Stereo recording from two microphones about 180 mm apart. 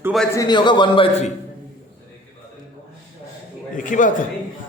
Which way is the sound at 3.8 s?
45° left (ahead or behind).